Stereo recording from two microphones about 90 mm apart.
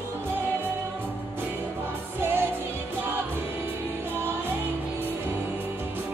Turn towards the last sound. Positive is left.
turn(degrees=-25)  # may be behind; listen again after turning